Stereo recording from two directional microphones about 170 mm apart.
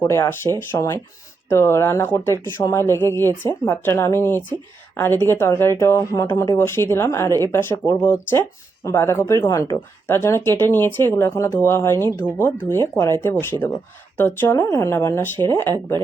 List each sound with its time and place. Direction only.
0.0 s speech: 15° left (ahead or behind)